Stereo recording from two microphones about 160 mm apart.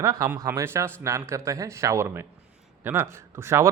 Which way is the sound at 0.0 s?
20° right (ahead or behind).